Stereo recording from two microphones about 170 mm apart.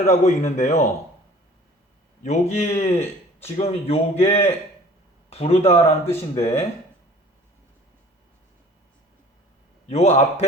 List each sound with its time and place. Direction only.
0.0 s speech: 45° left (ahead or behind)
2.2 s speech: 40° left (ahead or behind)
6.1 s speech: 15° left (ahead or behind)
9.9 s speech: 40° left (ahead or behind)